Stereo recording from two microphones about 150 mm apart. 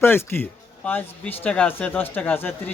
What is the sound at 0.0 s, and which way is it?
Speech, 15° left (ahead or behind).